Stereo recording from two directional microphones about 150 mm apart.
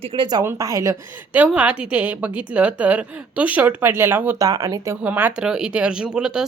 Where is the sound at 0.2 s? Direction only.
30° right (ahead or behind).